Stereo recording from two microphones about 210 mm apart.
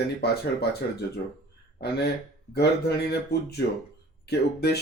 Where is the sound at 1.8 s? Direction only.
50° left (ahead or behind).